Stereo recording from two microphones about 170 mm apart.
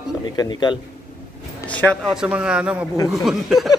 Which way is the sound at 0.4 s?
25° left (ahead or behind).